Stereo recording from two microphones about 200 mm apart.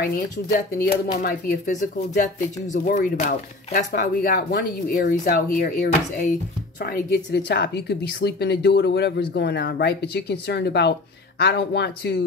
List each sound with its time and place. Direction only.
0.0 s a woman's voice: 50° left (ahead or behind)